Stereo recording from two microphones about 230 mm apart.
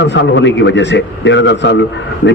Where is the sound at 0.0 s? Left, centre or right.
Left.